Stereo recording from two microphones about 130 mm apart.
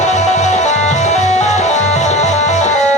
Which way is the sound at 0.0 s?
60° left (ahead or behind).